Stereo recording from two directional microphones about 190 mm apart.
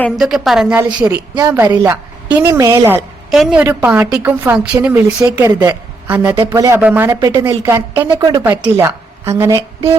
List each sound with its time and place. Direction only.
0.0 s a woman's voice: centre (ahead or behind)
1.4 s a woman's voice: 20° right (ahead or behind)
6.3 s a woman's voice: 20° right (ahead or behind)